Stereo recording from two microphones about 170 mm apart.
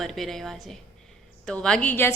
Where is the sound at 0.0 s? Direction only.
Centre (ahead or behind).